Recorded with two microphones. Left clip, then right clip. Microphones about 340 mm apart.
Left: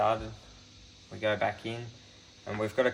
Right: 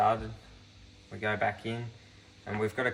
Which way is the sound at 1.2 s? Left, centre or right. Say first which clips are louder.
Left 2 dB; centre.